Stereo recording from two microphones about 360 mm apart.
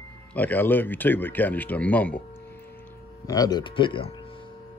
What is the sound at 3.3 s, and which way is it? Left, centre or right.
Speech, centre.